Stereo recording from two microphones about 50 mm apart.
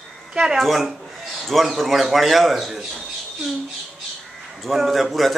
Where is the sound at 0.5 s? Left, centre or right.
Centre.